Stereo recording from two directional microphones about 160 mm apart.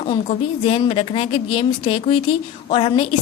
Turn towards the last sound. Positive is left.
turn(degrees=35)  # may be behind; listen again after turning